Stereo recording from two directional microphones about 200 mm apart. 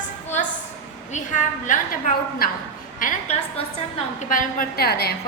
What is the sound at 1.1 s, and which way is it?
Speech, 40° left (ahead or behind).